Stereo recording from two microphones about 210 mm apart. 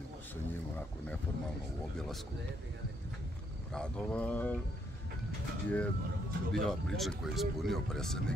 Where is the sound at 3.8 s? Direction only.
5° left (ahead or behind).